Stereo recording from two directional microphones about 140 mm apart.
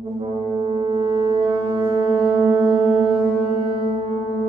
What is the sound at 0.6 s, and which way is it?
Music, 40° right (ahead or behind).